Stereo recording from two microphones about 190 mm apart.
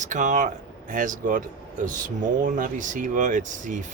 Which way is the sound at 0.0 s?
40° right (ahead or behind).